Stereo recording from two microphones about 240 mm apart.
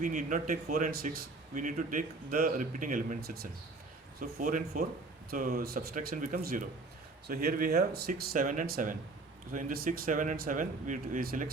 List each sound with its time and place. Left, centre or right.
0.0 s speech: right